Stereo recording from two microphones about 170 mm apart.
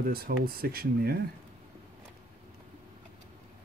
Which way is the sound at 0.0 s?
60° right (ahead or behind).